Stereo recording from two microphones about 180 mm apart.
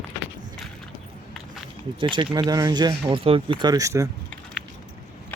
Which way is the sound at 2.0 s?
25° right (ahead or behind).